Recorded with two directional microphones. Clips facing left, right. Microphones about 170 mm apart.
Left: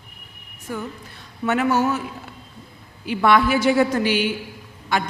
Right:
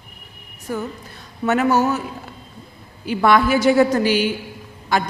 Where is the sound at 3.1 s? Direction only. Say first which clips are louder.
Right 2 dB; 40° right (ahead or behind).